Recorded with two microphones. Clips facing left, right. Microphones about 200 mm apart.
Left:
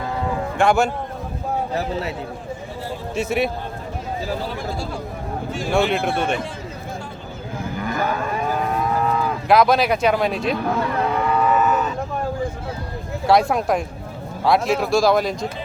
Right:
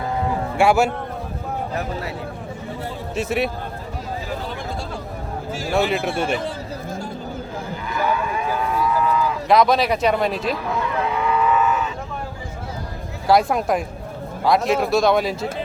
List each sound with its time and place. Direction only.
0.6 s speech: 5° right (ahead or behind)
1.7 s speech: 25° left (ahead or behind)
3.2 s speech: centre (ahead or behind)
5.5 s speech: 5° right (ahead or behind)
7.8 s cattle: 45° left (ahead or behind)
9.5 s speech: centre (ahead or behind)
10.7 s cattle: 45° left (ahead or behind)
13.2 s speech: centre (ahead or behind)